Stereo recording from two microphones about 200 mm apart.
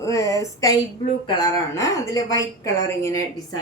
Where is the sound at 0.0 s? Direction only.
15° left (ahead or behind).